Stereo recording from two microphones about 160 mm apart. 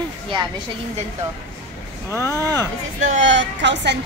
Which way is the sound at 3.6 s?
90° right.